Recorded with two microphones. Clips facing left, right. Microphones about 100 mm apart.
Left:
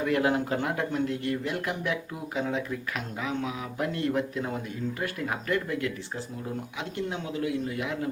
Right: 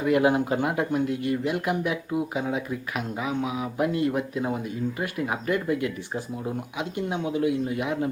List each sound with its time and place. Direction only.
0.0 s speech: 15° right (ahead or behind)
7.1 s a man's voice: 20° right (ahead or behind)